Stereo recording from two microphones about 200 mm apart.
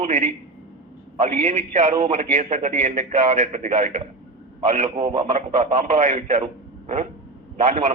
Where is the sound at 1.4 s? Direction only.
35° right (ahead or behind).